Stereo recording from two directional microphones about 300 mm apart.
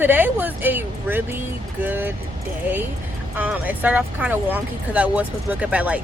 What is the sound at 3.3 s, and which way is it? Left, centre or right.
Speech, centre.